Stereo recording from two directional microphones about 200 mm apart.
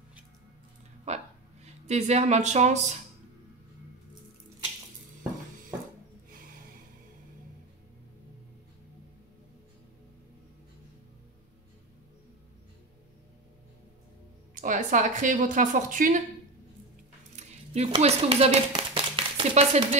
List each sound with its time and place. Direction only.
1.0 s a sound: 35° right (ahead or behind)
14.5 s a woman's voice: 40° right (ahead or behind)
17.4 s speech: 30° right (ahead or behind)